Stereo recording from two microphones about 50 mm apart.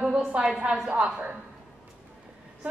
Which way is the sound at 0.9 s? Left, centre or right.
Right.